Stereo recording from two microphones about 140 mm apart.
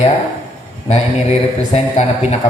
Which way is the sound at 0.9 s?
50° left (ahead or behind).